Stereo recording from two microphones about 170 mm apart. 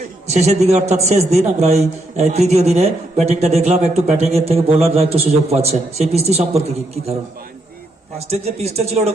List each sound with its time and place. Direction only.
0.3 s a man's voice: 40° right (ahead or behind)
8.3 s a man's voice: 40° right (ahead or behind)